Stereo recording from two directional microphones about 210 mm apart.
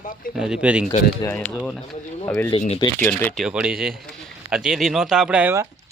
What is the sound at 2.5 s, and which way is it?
Speech, 25° left (ahead or behind).